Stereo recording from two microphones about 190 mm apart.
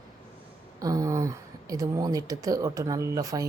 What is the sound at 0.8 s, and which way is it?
Speech, 15° right (ahead or behind).